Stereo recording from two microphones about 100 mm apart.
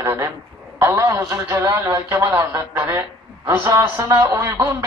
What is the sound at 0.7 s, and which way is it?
A man's voice, 30° right (ahead or behind).